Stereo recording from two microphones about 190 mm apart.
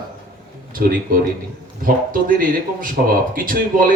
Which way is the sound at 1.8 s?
45° right (ahead or behind).